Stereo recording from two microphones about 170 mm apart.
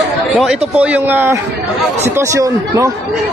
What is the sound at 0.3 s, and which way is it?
A man's voice, 5° right (ahead or behind).